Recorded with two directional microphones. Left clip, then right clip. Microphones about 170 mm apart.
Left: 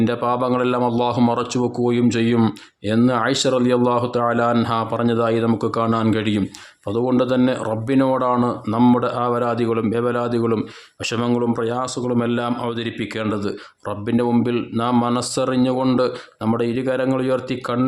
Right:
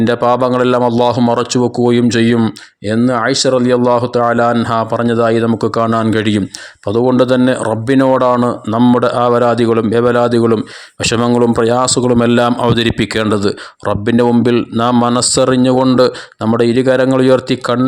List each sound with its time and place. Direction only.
0.0 s a man's voice: 35° right (ahead or behind)